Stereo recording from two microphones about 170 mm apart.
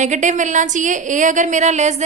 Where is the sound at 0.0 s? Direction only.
45° right (ahead or behind).